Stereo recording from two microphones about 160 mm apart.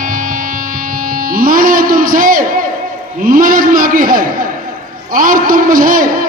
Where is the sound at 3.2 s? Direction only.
60° right (ahead or behind).